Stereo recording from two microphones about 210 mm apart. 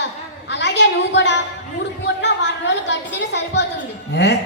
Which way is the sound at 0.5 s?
55° left (ahead or behind).